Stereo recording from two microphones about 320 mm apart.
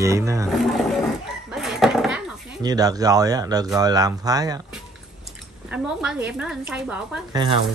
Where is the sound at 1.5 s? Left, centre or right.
Centre.